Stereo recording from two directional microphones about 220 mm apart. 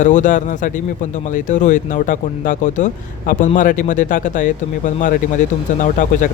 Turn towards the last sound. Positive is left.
turn(degrees=35)  # may be behind; listen again after turning